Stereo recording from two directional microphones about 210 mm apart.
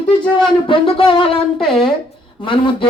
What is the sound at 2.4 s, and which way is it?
Speech, 25° left (ahead or behind).